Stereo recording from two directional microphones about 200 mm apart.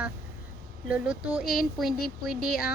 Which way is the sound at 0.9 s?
5° right (ahead or behind).